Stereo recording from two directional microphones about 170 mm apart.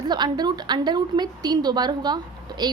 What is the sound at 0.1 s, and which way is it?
A woman's voice, 25° right (ahead or behind).